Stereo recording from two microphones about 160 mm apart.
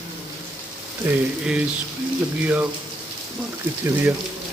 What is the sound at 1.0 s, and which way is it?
Speech, 10° right (ahead or behind).